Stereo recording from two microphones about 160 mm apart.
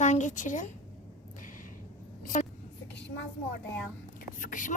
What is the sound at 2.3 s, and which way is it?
Vehicle, 55° left (ahead or behind).